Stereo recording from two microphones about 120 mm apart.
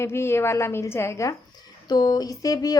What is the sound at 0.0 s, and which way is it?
A woman's voice, 20° left (ahead or behind).